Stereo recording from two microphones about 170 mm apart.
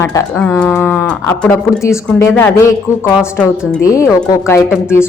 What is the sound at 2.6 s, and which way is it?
Speech, 15° left (ahead or behind).